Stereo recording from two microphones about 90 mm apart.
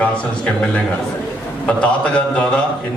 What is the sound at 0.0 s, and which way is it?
A man's voice, 15° left (ahead or behind).